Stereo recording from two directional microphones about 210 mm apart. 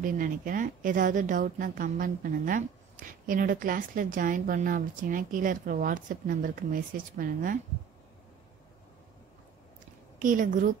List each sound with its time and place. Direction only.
0.0 s a woman's voice: 40° right (ahead or behind)
10.1 s a woman's voice: 40° right (ahead or behind)